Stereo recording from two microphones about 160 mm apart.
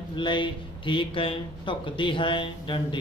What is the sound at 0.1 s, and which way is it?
Speech, 30° left (ahead or behind).